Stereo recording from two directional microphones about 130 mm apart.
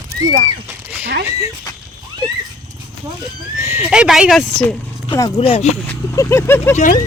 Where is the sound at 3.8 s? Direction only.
5° right (ahead or behind).